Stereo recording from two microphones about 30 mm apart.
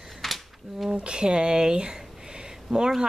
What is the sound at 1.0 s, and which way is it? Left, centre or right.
Speech, right.